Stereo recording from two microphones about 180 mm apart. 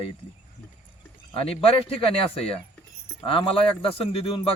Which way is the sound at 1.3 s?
30° left (ahead or behind).